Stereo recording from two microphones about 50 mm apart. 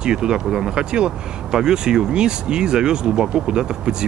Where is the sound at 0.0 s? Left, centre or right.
Centre.